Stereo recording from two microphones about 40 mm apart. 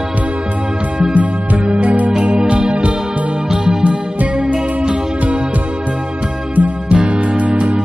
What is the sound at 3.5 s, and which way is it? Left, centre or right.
Music, centre.